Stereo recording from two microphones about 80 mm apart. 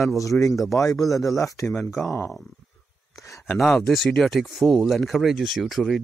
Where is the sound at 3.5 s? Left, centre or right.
Centre.